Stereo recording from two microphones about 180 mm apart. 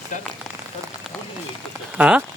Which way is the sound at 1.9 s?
5° right (ahead or behind).